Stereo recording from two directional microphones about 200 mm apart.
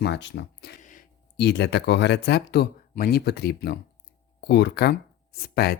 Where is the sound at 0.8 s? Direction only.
40° left (ahead or behind).